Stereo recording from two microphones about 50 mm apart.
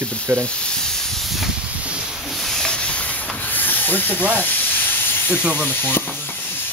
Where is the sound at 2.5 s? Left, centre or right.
Centre.